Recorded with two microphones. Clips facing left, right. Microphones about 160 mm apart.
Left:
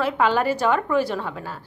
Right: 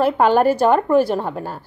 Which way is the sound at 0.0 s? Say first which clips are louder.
Right 6 dB; 50° right (ahead or behind).